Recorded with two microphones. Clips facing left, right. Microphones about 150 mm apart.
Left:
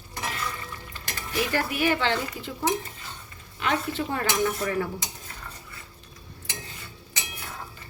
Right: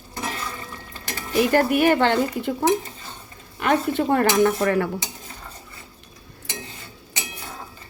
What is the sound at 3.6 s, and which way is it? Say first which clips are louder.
Speech: right 7 dB; 55° right (ahead or behind).